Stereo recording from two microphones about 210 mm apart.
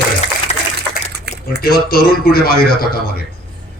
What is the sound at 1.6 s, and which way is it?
A man's voice, 45° left (ahead or behind).